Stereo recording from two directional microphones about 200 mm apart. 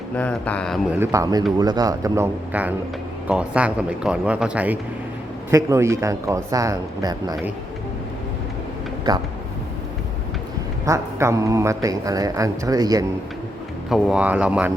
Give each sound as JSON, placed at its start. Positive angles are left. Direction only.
{"t": 0.2, "sound": "speech", "side_deg": 5}
{"t": 0.9, "sound": "a man's voice", "side_deg": -15}
{"t": 9.1, "sound": "speech", "side_deg": -20}
{"t": 10.8, "sound": "a man's voice", "side_deg": -15}
{"t": 13.9, "sound": "a man's voice", "side_deg": -5}